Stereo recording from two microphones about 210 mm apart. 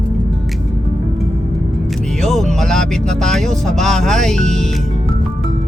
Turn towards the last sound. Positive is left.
turn(degrees=0)  # may be behind; listen again after turning